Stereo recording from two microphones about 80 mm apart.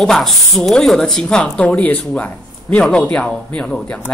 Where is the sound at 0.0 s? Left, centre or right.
Centre.